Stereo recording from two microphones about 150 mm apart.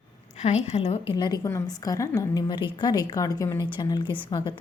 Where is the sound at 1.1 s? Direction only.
30° left (ahead or behind).